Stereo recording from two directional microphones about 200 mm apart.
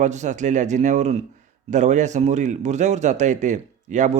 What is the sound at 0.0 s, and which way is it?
Speech, 35° right (ahead or behind).